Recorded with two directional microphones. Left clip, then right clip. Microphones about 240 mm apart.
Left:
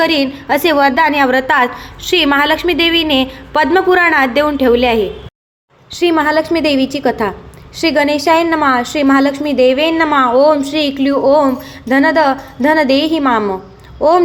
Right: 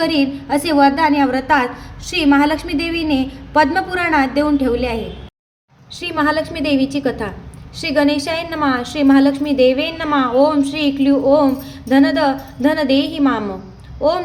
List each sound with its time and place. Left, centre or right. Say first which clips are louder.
0.0 s a woman's voice: left 4 dB; centre